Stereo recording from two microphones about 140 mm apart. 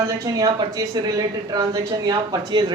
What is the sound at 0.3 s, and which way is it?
Speech, 25° right (ahead or behind).